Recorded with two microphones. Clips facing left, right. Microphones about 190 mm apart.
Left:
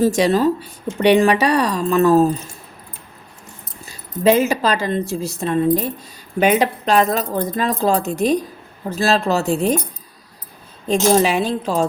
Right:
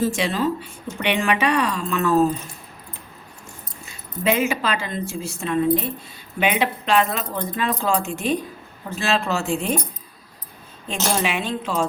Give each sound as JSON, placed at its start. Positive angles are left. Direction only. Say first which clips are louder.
{"t": 0.0, "sound": "speech", "louder": "left 7 dB", "side_deg": 40}
{"t": 3.8, "sound": "speech", "louder": "left 7 dB", "side_deg": 35}
{"t": 10.8, "sound": "speech", "louder": "left 9 dB", "side_deg": 40}